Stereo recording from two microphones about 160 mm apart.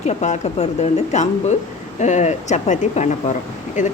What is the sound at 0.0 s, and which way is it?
Speech, 45° left (ahead or behind).